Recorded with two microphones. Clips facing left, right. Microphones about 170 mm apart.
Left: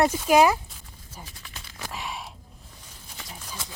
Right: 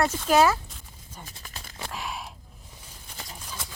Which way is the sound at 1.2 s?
45° right (ahead or behind).